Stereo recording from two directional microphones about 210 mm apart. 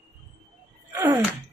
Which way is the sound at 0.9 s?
15° right (ahead or behind).